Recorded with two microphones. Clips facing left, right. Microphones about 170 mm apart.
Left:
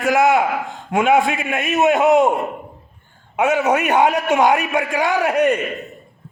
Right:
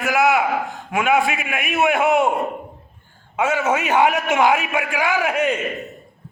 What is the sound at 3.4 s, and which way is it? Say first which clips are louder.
A man's voice: left 3 dB; 15° left (ahead or behind).